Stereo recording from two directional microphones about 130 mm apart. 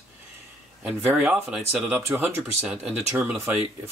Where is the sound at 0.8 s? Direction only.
10° right (ahead or behind).